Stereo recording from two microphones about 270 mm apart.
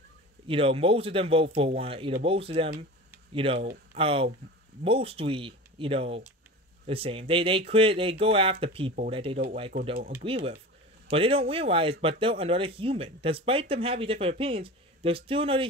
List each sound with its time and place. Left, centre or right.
0.5 s speech: centre